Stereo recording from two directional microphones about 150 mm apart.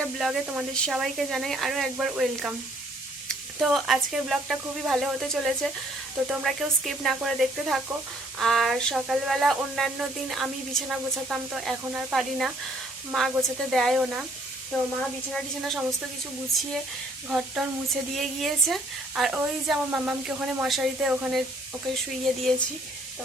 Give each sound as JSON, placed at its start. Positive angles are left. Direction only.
{"t": 0.0, "sound": "speech", "side_deg": 0}
{"t": 17.2, "sound": "a sound", "side_deg": -10}
{"t": 18.2, "sound": "speech", "side_deg": 0}